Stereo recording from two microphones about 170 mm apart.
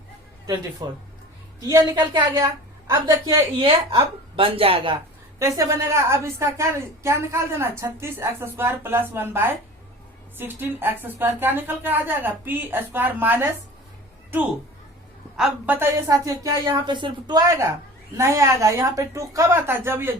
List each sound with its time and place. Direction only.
0.4 s a woman's voice: 25° right (ahead or behind)
4.4 s speech: 35° right (ahead or behind)
5.4 s a woman's voice: 15° right (ahead or behind)
15.4 s a woman's voice: 10° right (ahead or behind)